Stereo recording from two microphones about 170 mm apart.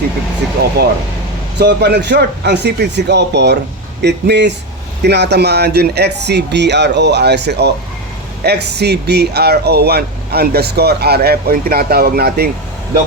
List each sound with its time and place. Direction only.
0.8 s speech: 70° right (ahead or behind)